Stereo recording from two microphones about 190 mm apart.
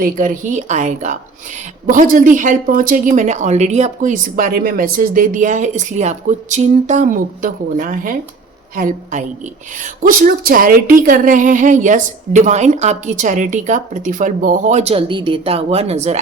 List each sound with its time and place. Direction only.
0.0 s speech: 45° right (ahead or behind)